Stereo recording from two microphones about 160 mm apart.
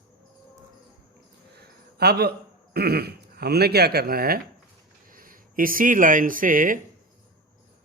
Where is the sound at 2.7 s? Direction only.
80° right; by 6.7 s 60° right (ahead or behind).